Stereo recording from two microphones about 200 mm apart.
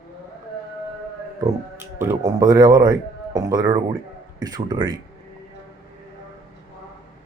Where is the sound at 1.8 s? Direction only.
10° right (ahead or behind).